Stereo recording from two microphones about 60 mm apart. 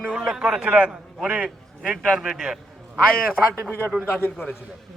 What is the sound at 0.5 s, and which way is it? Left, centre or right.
A man's voice, right.